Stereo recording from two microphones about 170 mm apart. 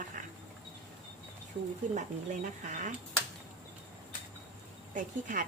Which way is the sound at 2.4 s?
45° right (ahead or behind).